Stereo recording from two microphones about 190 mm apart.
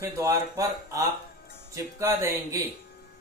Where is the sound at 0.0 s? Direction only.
15° right (ahead or behind).